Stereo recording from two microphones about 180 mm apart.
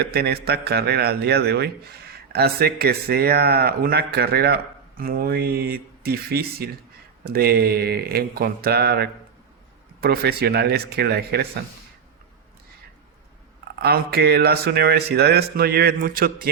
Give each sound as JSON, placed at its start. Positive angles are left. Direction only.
{"t": 0.0, "sound": "speech", "side_deg": -60}
{"t": 13.7, "sound": "speech", "side_deg": -60}